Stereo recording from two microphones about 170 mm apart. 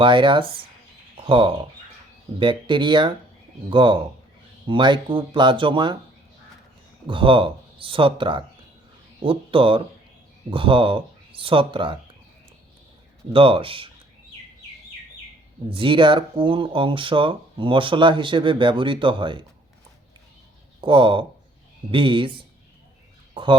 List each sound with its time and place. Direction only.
0.0 s speech: 30° right (ahead or behind)
7.1 s speech: 30° right (ahead or behind)
13.3 s speech: 30° right (ahead or behind)
15.7 s speech: 30° right (ahead or behind)
20.8 s speech: 30° right (ahead or behind)